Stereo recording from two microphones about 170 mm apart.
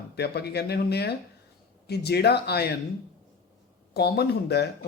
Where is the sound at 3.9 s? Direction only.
70° left (ahead or behind).